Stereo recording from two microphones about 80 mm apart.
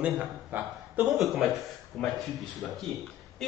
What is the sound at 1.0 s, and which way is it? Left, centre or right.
A man's voice, centre.